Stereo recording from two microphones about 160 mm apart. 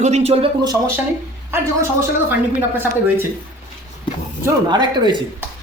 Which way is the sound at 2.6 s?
15° right (ahead or behind).